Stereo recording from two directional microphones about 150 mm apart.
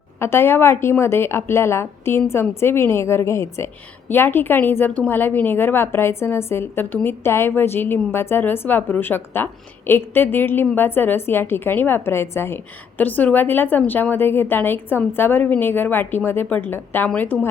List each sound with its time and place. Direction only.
0.2 s a woman's voice: 15° left (ahead or behind)